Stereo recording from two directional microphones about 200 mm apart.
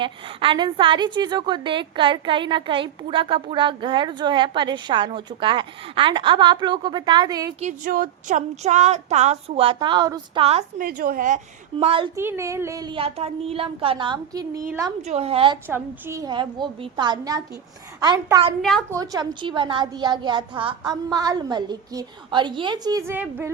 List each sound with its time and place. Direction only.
0.0 s a woman's voice: 25° right (ahead or behind)
7.6 s speech: 40° right (ahead or behind)
10.8 s a woman's voice: 45° right (ahead or behind)
11.8 s a woman's voice: 25° right (ahead or behind)
12.1 s a woman's voice: 15° right (ahead or behind)
15.0 s a woman's voice: 30° right (ahead or behind)
15.6 s a woman's voice: 10° right (ahead or behind)